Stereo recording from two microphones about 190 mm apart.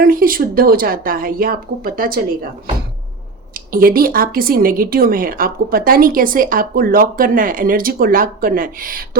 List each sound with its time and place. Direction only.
0.0 s speech: 50° right (ahead or behind)
3.5 s speech: 50° right (ahead or behind)